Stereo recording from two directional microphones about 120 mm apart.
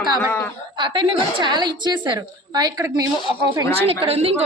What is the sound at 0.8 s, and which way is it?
A woman's voice, 40° right (ahead or behind).